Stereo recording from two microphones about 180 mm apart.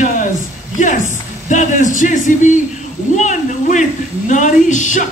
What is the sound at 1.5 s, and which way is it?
A man's voice, 45° left (ahead or behind).